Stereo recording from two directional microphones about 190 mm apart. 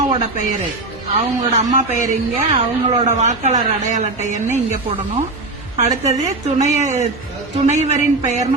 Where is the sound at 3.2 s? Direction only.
40° right (ahead or behind).